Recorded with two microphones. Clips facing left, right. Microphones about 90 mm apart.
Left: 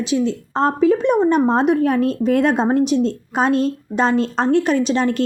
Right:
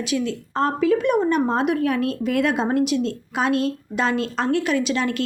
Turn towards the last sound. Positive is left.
turn(degrees=35)  # may be behind; listen again after turning